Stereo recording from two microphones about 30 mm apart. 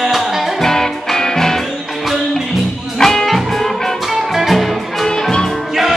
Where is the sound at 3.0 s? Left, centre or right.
Centre.